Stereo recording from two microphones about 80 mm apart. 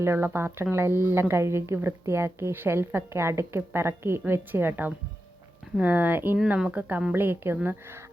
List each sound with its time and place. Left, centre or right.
0.0 s a woman's voice: right